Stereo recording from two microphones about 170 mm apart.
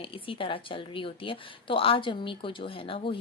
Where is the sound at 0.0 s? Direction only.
30° left (ahead or behind).